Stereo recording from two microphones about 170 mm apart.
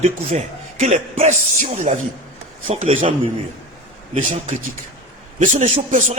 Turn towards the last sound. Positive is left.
turn(degrees=-50)  # may be behind; listen again after turning